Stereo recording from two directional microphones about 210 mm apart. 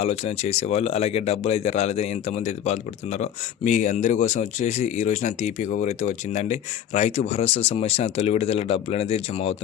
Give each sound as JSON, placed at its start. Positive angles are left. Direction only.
{"t": 0.0, "sound": "a man's voice", "side_deg": 30}